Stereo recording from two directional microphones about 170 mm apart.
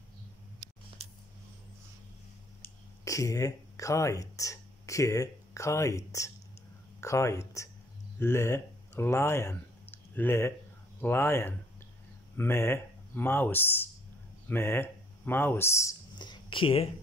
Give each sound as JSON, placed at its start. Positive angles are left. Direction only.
{"t": 2.6, "sound": "speech", "side_deg": 20}